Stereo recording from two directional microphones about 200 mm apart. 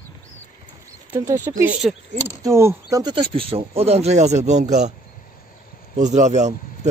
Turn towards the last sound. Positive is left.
turn(degrees=-35)  # may be behind; listen again after turning